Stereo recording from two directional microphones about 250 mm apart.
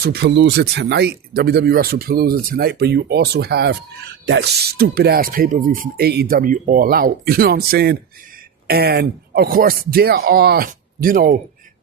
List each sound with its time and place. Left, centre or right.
0.0 s speech: right